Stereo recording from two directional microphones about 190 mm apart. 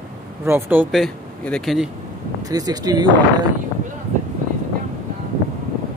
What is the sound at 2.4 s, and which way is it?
Speech, 20° right (ahead or behind).